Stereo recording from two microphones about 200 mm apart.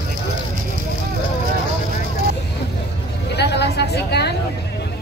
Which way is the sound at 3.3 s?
55° left (ahead or behind).